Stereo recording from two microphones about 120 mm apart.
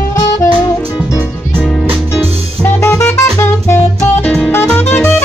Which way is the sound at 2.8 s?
20° left (ahead or behind).